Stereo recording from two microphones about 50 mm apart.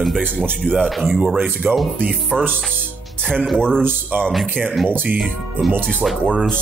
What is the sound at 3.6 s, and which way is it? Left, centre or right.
Music, centre.